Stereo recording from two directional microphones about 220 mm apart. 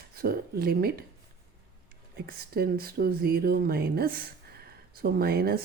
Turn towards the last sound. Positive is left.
turn(degrees=-45)  # may be behind; listen again after turning